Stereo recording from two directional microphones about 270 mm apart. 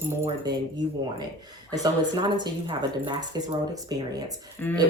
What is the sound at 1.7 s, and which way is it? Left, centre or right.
Speech, centre.